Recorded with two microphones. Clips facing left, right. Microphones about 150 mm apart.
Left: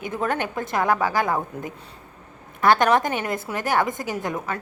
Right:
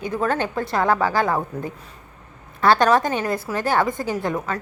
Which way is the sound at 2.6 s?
20° left (ahead or behind).